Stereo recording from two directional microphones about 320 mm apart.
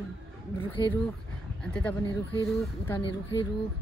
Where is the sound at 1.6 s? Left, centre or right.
Centre.